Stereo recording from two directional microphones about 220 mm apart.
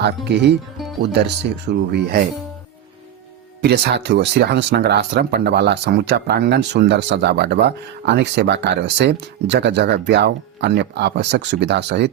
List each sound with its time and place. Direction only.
0.3 s speech: 50° right (ahead or behind)
3.6 s speech: 50° right (ahead or behind)